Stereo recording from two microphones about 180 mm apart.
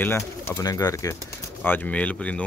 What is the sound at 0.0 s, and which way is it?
Speech, 15° left (ahead or behind).